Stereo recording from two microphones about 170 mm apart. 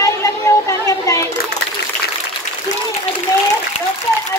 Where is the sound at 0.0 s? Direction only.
20° left (ahead or behind).